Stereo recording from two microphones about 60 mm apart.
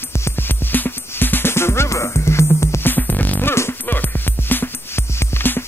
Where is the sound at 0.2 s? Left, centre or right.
Left.